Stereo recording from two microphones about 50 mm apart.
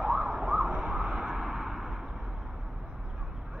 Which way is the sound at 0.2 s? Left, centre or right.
Right.